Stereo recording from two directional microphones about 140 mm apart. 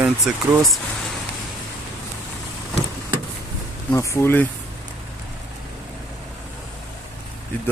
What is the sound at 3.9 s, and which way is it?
Speech, 20° left (ahead or behind).